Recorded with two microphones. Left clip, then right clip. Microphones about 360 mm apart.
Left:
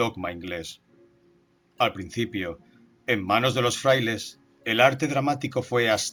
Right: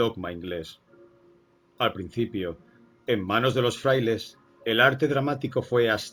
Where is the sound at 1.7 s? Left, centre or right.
Centre.